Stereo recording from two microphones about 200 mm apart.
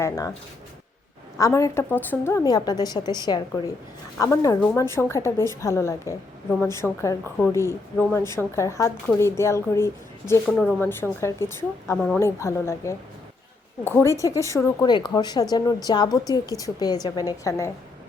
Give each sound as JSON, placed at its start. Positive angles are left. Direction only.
{"t": 0.0, "sound": "a woman's voice", "side_deg": 15}
{"t": 1.4, "sound": "a woman's voice", "side_deg": 15}